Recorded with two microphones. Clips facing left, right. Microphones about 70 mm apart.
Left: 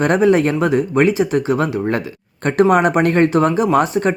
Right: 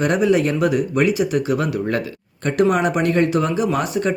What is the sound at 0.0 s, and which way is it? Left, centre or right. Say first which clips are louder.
Speech: left 3 dB; left.